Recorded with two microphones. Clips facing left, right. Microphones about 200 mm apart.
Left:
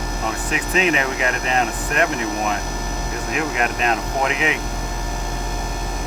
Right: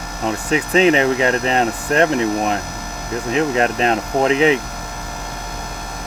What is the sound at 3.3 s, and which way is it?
Speech, 30° right (ahead or behind).